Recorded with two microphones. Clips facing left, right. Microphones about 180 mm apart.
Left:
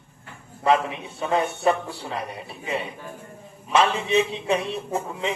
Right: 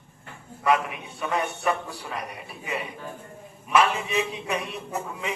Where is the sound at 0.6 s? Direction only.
25° left (ahead or behind).